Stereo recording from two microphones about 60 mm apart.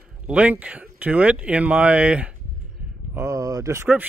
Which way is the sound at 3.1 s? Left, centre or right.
Right.